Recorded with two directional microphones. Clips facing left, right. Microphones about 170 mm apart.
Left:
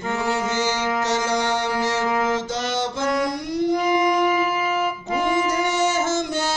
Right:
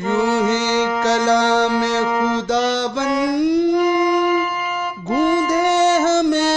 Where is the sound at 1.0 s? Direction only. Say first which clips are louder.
Right 8 dB; 75° right (ahead or behind).